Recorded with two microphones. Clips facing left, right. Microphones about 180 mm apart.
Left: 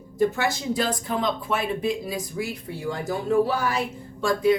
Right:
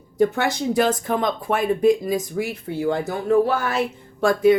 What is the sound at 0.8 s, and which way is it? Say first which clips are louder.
Speech: right 7 dB; 50° right (ahead or behind).